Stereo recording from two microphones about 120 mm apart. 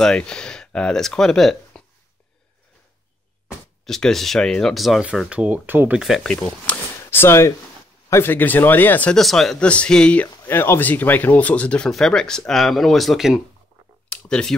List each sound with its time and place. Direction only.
0.0 s speech: 5° left (ahead or behind)
3.8 s speech: 5° left (ahead or behind)
5.3 s speech: 10° right (ahead or behind)
5.9 s speech: 5° right (ahead or behind)
6.3 s speech: 10° left (ahead or behind)
9.1 s speech: centre (ahead or behind)
14.0 s a sound: 10° left (ahead or behind)